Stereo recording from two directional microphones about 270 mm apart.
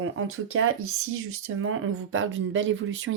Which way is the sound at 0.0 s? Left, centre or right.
Right.